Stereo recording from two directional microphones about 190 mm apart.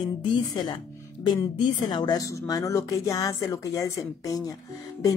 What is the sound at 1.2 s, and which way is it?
Speech, 20° left (ahead or behind).